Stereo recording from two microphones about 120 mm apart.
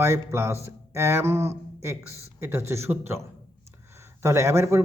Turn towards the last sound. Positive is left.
turn(degrees=-25)  # may be behind; listen again after turning